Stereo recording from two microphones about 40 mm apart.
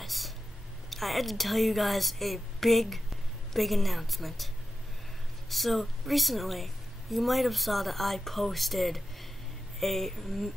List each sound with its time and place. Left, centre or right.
0.0 s a sound: centre
0.8 s a woman's voice: centre
5.5 s a woman's voice: centre